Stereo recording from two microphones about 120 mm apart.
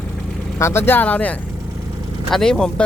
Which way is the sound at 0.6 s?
20° left (ahead or behind).